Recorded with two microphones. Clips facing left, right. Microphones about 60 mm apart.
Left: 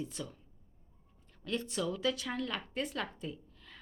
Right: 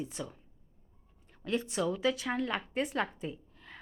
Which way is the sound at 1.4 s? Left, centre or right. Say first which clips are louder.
Right 4 dB; centre.